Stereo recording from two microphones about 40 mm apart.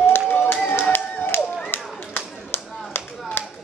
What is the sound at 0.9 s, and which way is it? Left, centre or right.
Clapping, left.